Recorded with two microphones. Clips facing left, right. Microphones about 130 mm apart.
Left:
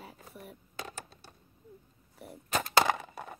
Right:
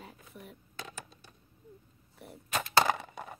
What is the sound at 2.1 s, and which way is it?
Speech, centre (ahead or behind).